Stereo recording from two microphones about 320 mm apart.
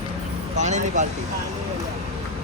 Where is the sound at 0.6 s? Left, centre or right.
Right.